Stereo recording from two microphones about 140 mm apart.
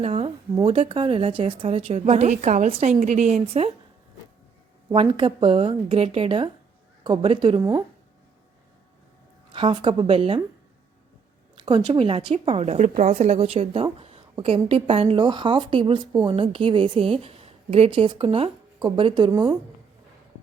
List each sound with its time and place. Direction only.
0.0 s a woman's voice: 45° right (ahead or behind)
4.9 s a woman's voice: 40° right (ahead or behind)
9.5 s a woman's voice: 35° right (ahead or behind)
11.5 s a woman's voice: 35° right (ahead or behind)